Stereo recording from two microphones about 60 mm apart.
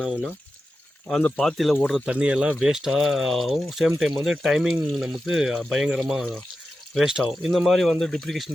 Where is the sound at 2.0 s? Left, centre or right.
Centre.